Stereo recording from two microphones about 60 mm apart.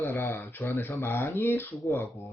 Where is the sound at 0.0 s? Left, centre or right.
Left.